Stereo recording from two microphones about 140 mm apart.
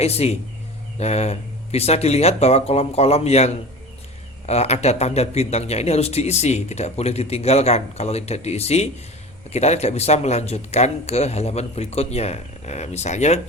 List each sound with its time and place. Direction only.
0.0 s speech: 50° left (ahead or behind)